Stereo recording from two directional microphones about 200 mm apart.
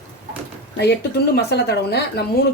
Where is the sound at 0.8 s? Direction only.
55° left (ahead or behind).